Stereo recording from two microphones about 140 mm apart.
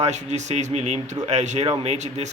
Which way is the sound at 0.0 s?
55° right (ahead or behind).